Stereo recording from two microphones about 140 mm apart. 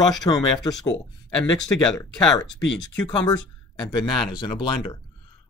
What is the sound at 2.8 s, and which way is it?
Speech, 30° left (ahead or behind).